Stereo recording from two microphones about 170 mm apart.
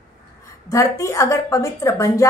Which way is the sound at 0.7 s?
20° left (ahead or behind).